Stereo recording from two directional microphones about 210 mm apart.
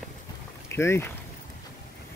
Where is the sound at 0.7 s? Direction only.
10° left (ahead or behind).